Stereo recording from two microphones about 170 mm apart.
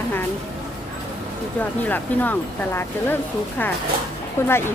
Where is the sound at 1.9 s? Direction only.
10° left (ahead or behind).